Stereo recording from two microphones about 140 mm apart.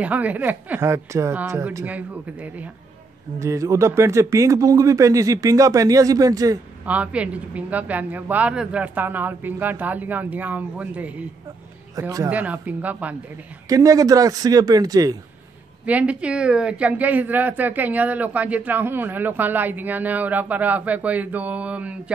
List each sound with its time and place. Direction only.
0.0 s a man's voice: 10° right (ahead or behind)
1.9 s a man's voice: 10° right (ahead or behind)
3.3 s speech: 20° right (ahead or behind)
6.9 s a man's voice: 10° right (ahead or behind)
11.9 s speech: 25° right (ahead or behind)
12.3 s a man's voice: 10° right (ahead or behind)
13.7 s speech: 25° right (ahead or behind)
15.8 s a man's voice: 10° right (ahead or behind)